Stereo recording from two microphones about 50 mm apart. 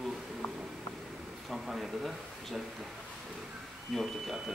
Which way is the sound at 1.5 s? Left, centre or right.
Centre.